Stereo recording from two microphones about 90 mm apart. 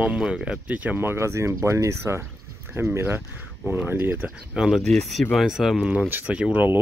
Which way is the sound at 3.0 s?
25° right (ahead or behind).